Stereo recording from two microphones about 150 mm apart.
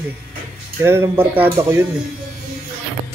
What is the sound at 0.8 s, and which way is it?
Speech, 15° right (ahead or behind).